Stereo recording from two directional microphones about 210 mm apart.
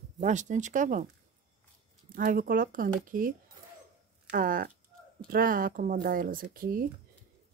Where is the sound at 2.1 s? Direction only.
45° right (ahead or behind).